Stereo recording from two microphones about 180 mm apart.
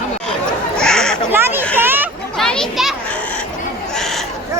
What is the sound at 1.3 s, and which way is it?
Speech, 10° right (ahead or behind).